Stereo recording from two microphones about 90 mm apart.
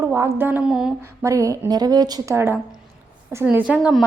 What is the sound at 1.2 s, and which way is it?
Speech, 35° right (ahead or behind).